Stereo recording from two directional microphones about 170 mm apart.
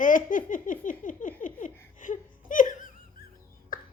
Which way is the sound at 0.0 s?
50° left (ahead or behind).